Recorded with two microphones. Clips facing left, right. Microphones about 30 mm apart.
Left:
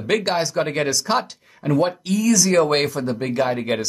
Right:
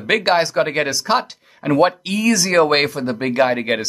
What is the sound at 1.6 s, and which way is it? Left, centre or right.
Speech, right.